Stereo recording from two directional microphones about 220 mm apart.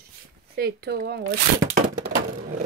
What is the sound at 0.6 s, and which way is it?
Speech, 45° right (ahead or behind).